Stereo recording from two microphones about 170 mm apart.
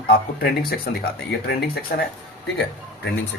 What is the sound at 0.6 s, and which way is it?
Speech, 65° left (ahead or behind).